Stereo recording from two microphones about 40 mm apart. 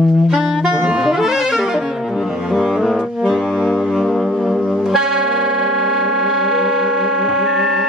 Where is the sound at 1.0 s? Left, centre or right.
Centre.